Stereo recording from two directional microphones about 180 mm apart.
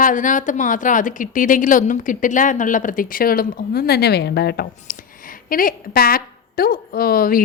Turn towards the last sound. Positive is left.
turn(degrees=55)  # may be behind; listen again after turning